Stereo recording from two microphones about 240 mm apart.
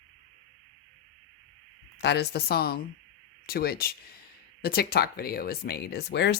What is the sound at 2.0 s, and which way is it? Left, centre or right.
Speech, left.